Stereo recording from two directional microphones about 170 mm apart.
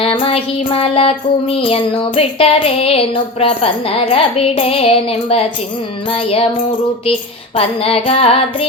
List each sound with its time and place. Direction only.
0.0 s child singing: 35° left (ahead or behind)